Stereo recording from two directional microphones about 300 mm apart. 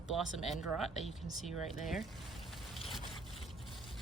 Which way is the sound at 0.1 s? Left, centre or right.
Centre.